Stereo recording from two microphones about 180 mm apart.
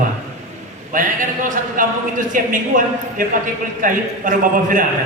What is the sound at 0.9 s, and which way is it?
A man's voice, 45° right (ahead or behind).